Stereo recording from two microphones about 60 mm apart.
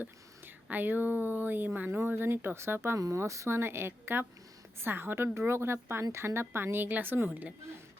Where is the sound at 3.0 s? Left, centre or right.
Right.